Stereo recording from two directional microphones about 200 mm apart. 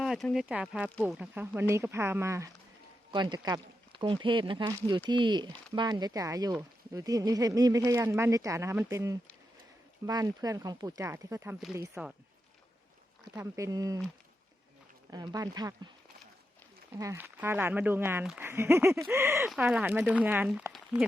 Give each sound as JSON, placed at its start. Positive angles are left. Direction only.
{"t": 0.0, "sound": "speech", "side_deg": 0}
{"t": 13.3, "sound": "speech", "side_deg": -15}
{"t": 15.1, "sound": "speech", "side_deg": -20}
{"t": 17.0, "sound": "speech", "side_deg": -15}